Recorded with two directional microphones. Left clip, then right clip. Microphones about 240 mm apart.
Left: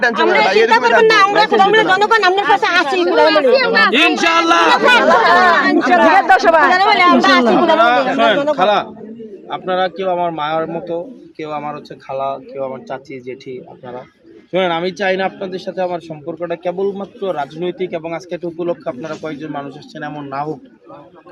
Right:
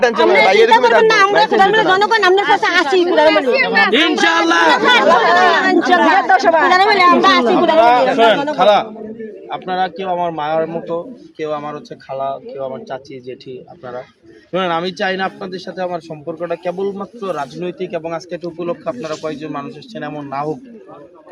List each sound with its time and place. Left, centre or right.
0.4 s a man's voice: right
0.7 s speech: left
3.9 s a sound: centre
4.9 s speech: left
7.8 s a man's voice: centre
9.5 s a man's voice: centre
14.5 s a man's voice: centre